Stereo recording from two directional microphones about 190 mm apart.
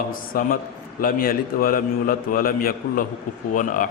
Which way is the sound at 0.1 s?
50° left (ahead or behind).